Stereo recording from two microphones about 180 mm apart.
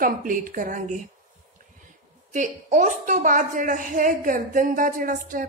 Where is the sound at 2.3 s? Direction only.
45° right (ahead or behind).